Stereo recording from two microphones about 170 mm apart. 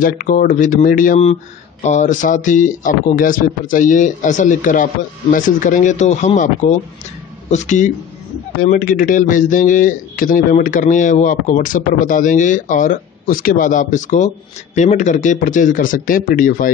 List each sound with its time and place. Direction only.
0.0 s a man's voice: 55° left (ahead or behind)